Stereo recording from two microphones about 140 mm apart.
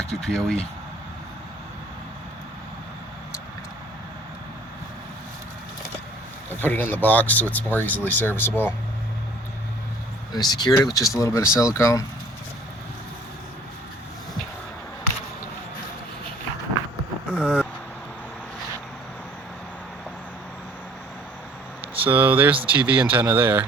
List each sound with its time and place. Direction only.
0.2 s speech: 5° left (ahead or behind)
6.5 s speech: 15° left (ahead or behind)
10.3 s speech: 30° left (ahead or behind)
17.3 s vehicle: 10° right (ahead or behind)
21.9 s speech: 15° right (ahead or behind)